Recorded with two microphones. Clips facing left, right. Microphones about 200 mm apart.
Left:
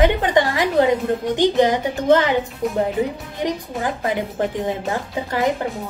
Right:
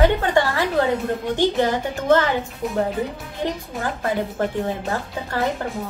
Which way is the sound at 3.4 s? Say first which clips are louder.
Left 3 dB; 15° left (ahead or behind).